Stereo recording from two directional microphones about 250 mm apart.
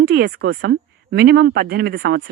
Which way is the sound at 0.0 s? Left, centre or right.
Right.